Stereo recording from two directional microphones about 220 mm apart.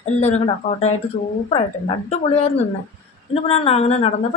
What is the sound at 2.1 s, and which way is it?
A woman's voice, 30° left (ahead or behind).